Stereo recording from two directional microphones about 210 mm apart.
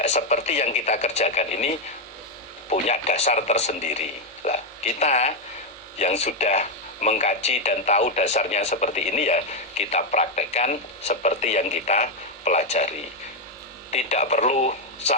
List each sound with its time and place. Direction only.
0.0 s speech: 35° left (ahead or behind)
13.9 s speech: 30° left (ahead or behind)